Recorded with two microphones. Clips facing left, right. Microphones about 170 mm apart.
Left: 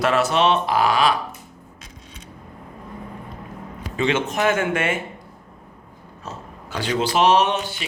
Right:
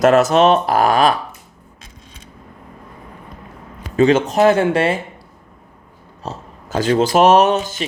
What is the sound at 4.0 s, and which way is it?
A man's voice, 40° right (ahead or behind).